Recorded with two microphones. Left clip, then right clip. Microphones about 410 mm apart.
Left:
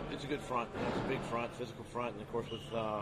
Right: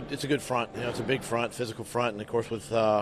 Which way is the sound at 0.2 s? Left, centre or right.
Right.